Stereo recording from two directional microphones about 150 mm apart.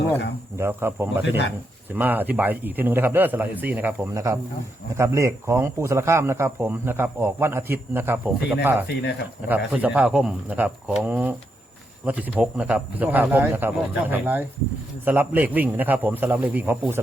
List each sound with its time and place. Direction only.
0.5 s speech: 15° right (ahead or behind)